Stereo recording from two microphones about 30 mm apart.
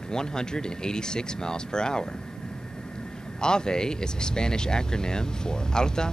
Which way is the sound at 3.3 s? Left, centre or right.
Left.